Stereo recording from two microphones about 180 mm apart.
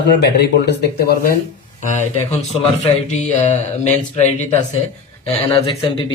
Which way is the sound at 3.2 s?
40° left (ahead or behind).